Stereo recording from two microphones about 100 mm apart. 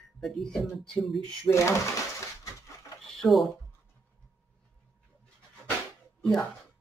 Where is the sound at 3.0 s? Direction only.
Centre (ahead or behind).